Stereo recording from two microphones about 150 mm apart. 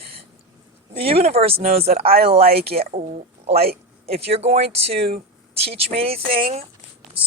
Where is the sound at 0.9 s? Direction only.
40° right (ahead or behind).